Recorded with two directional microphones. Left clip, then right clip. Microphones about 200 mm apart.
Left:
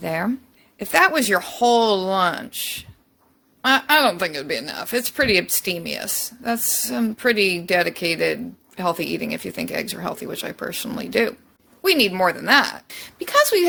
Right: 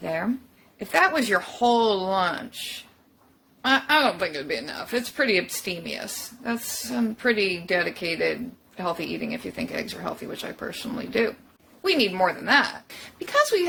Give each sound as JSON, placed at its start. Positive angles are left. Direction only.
{"t": 0.0, "sound": "speech", "side_deg": 50}
{"t": 3.6, "sound": "speech", "side_deg": 50}